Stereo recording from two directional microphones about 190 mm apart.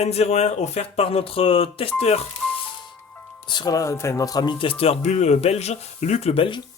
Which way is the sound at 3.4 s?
25° left (ahead or behind).